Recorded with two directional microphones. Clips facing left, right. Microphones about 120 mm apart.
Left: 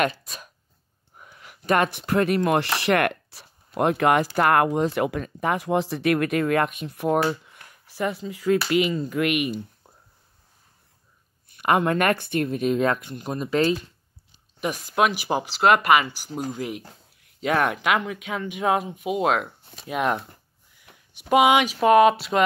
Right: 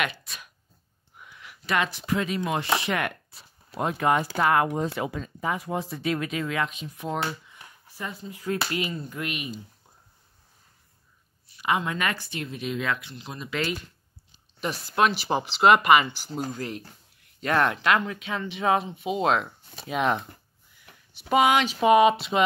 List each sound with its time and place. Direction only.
0.0 s speech: 40° left (ahead or behind); by 9.7 s 70° left (ahead or behind)
11.4 s speech: 55° left (ahead or behind); by 13.7 s 35° left (ahead or behind)
14.6 s speech: 15° left (ahead or behind)
20.8 s a sound: 10° left (ahead or behind)
21.7 s speech: 5° right (ahead or behind)